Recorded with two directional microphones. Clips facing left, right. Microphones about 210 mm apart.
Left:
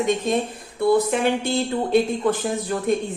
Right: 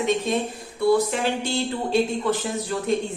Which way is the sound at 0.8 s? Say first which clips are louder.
Left 2 dB; 55° left (ahead or behind).